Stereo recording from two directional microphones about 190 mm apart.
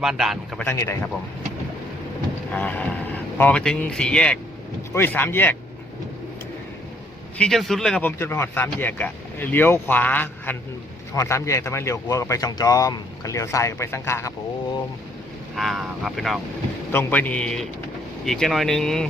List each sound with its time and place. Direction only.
0.0 s speech: centre (ahead or behind)
0.6 s speech: 15° left (ahead or behind)
2.5 s speech: 10° left (ahead or behind)
7.3 s speech: 5° left (ahead or behind)
15.5 s speech: centre (ahead or behind)
16.9 s speech: 10° left (ahead or behind)